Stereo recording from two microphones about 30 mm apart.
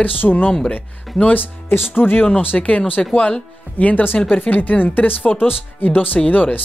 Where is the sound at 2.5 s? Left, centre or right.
Left.